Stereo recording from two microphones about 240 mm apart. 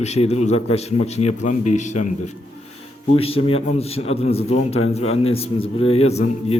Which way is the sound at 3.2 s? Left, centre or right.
Left.